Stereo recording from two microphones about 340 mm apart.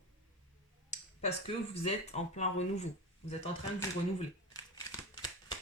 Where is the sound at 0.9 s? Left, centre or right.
Left.